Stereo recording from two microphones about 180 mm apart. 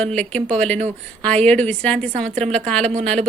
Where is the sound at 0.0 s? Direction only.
5° left (ahead or behind).